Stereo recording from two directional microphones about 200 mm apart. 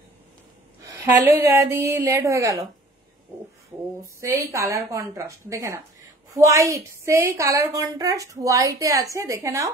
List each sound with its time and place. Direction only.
0.8 s a woman's voice: 15° right (ahead or behind)
4.0 s a woman's voice: 15° right (ahead or behind)